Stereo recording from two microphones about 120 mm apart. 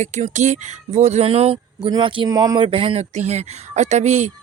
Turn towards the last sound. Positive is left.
turn(degrees=-70)  # may be behind; listen again after turning